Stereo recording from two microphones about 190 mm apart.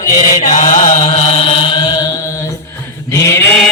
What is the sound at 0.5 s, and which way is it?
Chant, 40° left (ahead or behind).